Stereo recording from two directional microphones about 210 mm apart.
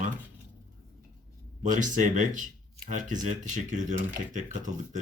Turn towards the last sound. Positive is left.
turn(degrees=-35)  # may be behind; listen again after turning